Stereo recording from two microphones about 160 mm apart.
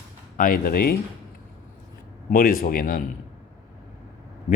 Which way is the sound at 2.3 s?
60° left (ahead or behind).